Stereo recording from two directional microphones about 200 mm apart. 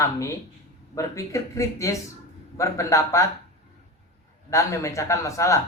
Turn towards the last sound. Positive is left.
turn(degrees=15)  # may be behind; listen again after turning